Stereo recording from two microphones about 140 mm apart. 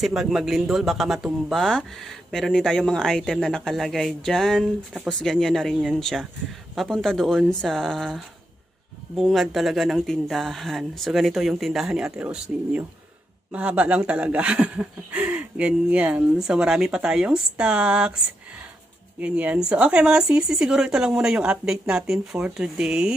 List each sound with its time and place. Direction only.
0.0 s speech: 5° right (ahead or behind)
19.2 s speech: 10° right (ahead or behind)